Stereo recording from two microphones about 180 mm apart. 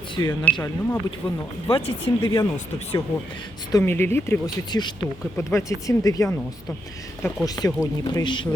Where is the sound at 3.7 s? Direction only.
15° left (ahead or behind).